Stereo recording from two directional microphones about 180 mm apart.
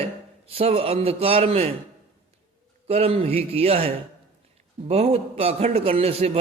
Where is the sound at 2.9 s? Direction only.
35° right (ahead or behind).